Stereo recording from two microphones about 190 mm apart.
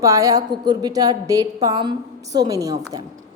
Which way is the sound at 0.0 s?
20° right (ahead or behind).